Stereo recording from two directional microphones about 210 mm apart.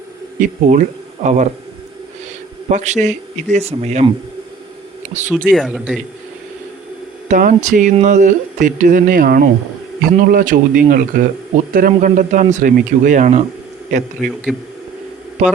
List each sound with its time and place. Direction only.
0.3 s speech: 40° right (ahead or behind)
2.6 s speech: 35° right (ahead or behind)
5.5 s speech: centre (ahead or behind)
7.3 s speech: 35° right (ahead or behind)
14.2 s speech: centre (ahead or behind)
15.4 s speech: 35° right (ahead or behind)